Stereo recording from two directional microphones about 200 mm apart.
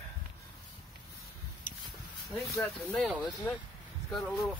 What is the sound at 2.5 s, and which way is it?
Speech, 5° left (ahead or behind).